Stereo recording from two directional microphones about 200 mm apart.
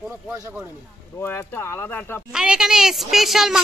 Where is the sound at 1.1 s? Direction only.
10° left (ahead or behind).